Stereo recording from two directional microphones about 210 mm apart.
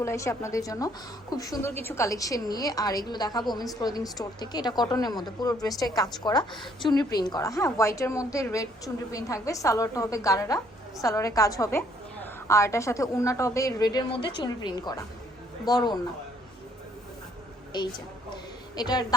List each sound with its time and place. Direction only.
0.0 s a woman's voice: 15° left (ahead or behind)
18.8 s speech: 20° left (ahead or behind)